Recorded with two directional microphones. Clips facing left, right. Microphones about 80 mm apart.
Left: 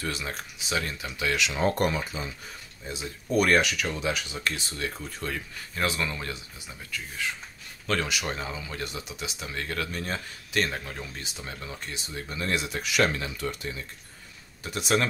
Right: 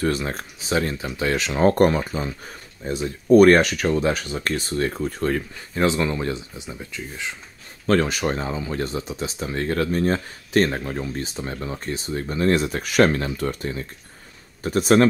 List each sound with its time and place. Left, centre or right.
0.0 s speech: right
5.8 s speech: right
7.8 s speech: right